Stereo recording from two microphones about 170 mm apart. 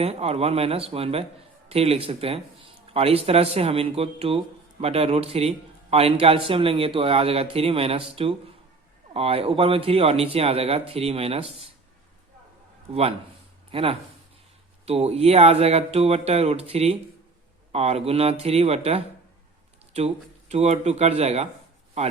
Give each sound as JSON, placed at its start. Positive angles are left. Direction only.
{"t": 0.0, "sound": "speech", "side_deg": -35}
{"t": 12.9, "sound": "speech", "side_deg": -35}
{"t": 20.5, "sound": "speech", "side_deg": -40}